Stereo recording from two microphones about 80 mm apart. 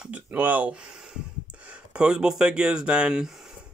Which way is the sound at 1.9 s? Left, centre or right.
Centre.